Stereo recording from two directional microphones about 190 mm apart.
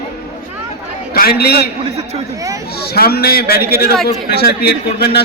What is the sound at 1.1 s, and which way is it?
Speech, 55° left (ahead or behind).